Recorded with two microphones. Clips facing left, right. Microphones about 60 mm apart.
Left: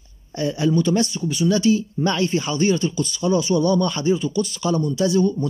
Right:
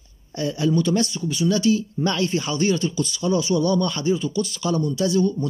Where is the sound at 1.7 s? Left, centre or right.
Left.